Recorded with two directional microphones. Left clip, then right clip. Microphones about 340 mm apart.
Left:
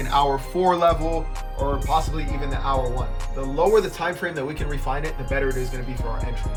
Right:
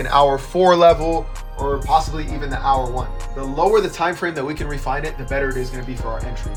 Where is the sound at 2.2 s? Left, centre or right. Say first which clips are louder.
Right 6 dB; centre.